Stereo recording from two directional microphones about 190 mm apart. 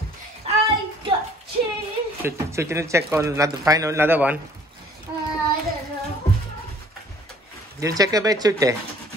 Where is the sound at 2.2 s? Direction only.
15° right (ahead or behind).